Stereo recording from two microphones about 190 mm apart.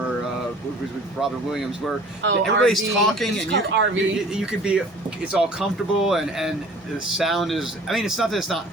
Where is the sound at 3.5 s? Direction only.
70° right (ahead or behind).